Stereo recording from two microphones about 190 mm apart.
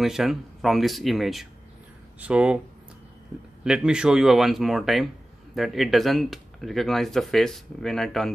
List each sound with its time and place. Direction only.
0.0 s speech: centre (ahead or behind)
3.6 s speech: 5° right (ahead or behind)